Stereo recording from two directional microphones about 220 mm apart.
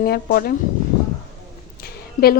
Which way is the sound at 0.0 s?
45° left (ahead or behind).